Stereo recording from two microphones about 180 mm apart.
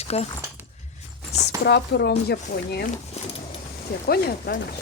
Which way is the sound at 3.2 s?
35° left (ahead or behind).